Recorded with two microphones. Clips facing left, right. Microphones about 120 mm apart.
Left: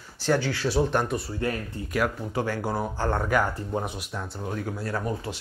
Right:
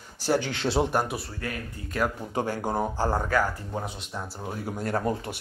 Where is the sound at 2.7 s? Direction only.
45° right (ahead or behind).